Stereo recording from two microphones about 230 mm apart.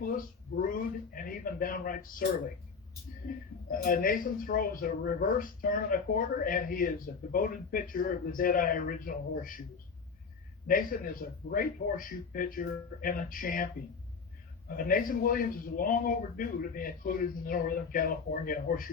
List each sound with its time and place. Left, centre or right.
0.5 s a sound: left
3.7 s a man's voice: left
10.7 s a man's voice: left
14.8 s a man's voice: left